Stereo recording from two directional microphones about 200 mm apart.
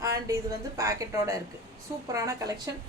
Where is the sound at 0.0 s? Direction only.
15° right (ahead or behind).